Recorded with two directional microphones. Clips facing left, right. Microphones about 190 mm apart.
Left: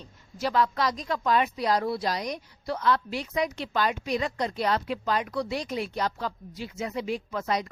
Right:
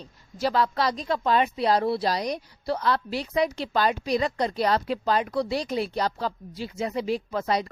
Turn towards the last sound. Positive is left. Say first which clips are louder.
# right 3 dB
turn(degrees=-35)  # may be behind; listen again after turning